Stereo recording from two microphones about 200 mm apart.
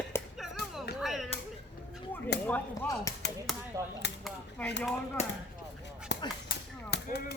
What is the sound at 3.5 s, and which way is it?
Chop, centre (ahead or behind).